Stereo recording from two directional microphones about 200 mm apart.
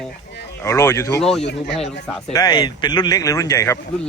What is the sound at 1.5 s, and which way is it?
Speech, 60° left (ahead or behind).